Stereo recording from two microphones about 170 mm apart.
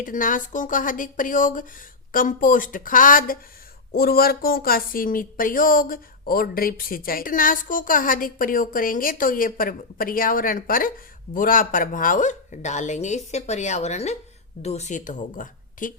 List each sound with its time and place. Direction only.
0.0 s speech: 50° left (ahead or behind)